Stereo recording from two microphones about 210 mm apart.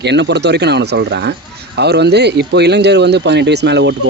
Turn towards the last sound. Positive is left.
turn(degrees=-55)  # may be behind; listen again after turning